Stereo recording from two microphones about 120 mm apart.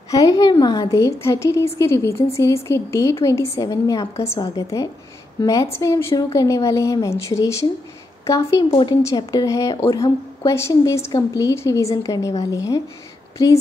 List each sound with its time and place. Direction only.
0.1 s a woman's voice: 30° left (ahead or behind)